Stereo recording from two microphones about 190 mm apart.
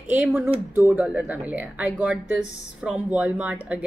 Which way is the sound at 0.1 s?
5° right (ahead or behind).